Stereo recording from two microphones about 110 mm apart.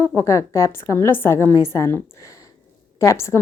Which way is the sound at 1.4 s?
30° right (ahead or behind).